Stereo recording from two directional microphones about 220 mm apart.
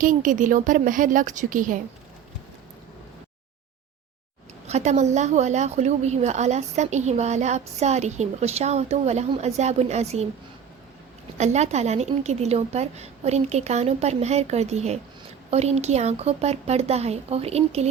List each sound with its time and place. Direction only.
0.0 s a woman's voice: 35° right (ahead or behind)
4.6 s a woman's voice: 30° right (ahead or behind)
11.3 s a woman's voice: 30° right (ahead or behind)